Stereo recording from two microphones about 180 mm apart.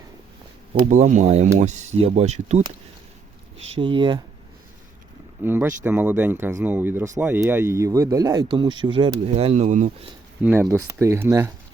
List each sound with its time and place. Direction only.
0.9 s speech: 45° right (ahead or behind)
3.6 s speech: 25° right (ahead or behind)
5.4 s speech: 10° right (ahead or behind); by 9.9 s 40° right (ahead or behind)
10.4 s speech: 10° right (ahead or behind)